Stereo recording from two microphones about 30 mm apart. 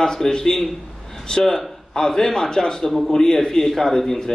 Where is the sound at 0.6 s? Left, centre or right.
Centre.